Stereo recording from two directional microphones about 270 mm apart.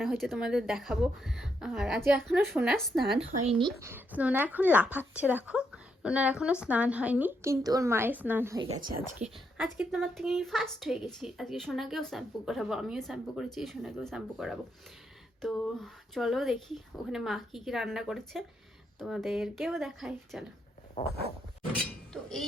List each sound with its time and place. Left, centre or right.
0.0 s speech: centre
3.2 s speech: right
3.8 s a woman's voice: centre
22.1 s dishes: centre